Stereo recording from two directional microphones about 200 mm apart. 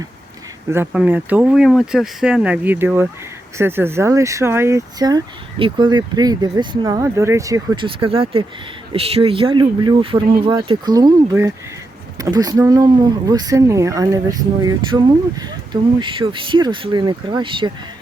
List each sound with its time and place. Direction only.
0.7 s speech: 10° right (ahead or behind)